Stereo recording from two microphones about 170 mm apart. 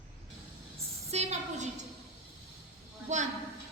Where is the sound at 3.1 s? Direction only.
45° right (ahead or behind).